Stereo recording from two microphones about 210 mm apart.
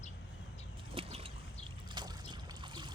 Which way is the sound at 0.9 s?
25° right (ahead or behind).